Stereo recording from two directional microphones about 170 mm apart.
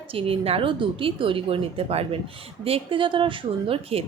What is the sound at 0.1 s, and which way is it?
A woman's voice, 35° right (ahead or behind).